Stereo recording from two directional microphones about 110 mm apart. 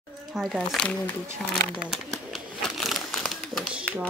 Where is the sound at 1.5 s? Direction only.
Centre (ahead or behind).